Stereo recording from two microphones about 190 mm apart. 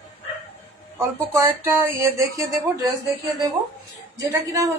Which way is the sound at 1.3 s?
15° right (ahead or behind).